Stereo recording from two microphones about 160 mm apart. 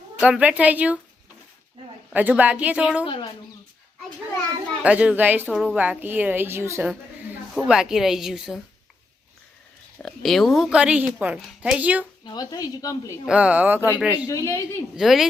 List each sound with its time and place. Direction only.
0.2 s a woman's voice: 5° right (ahead or behind)
2.1 s a woman's voice: 10° right (ahead or behind)
3.1 s speech: 30° left (ahead or behind)
4.8 s a woman's voice: 10° right (ahead or behind)
7.5 s a woman's voice: 5° right (ahead or behind)
10.0 s a woman's voice: centre (ahead or behind)
12.2 s speech: 25° left (ahead or behind)
13.2 s a woman's voice: 5° right (ahead or behind)
14.3 s speech: 20° left (ahead or behind)
14.9 s a woman's voice: centre (ahead or behind)